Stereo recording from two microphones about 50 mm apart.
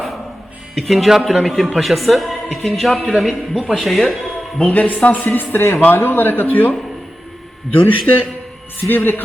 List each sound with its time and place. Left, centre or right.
0.8 s a man's voice: centre
4.6 s a man's voice: left